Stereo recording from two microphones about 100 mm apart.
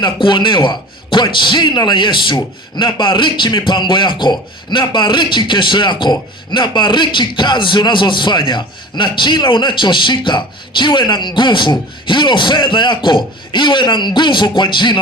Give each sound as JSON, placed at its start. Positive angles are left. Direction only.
{"t": 0.0, "sound": "a man's voice", "side_deg": 50}